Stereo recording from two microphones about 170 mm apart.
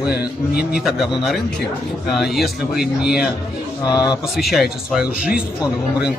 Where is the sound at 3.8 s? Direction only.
25° left (ahead or behind).